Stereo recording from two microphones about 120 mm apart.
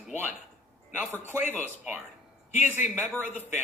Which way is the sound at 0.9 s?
15° right (ahead or behind).